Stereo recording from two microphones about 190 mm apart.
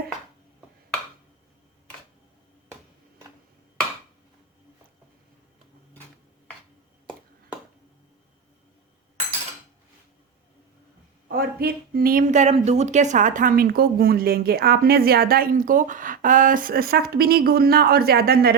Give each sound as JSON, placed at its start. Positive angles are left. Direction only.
{"t": 11.3, "sound": "speech", "side_deg": -50}